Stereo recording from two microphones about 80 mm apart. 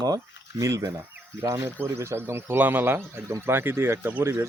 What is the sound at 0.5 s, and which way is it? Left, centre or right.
A man's voice, right.